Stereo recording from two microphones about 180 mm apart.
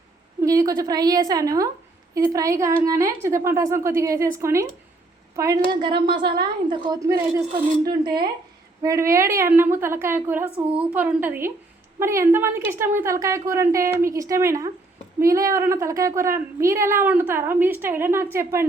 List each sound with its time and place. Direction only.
0.4 s a woman's voice: 20° right (ahead or behind)